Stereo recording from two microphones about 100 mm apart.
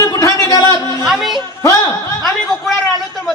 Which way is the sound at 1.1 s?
Centre (ahead or behind).